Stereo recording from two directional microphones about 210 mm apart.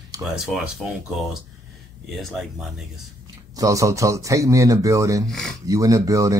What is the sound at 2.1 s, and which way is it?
Speech, centre (ahead or behind).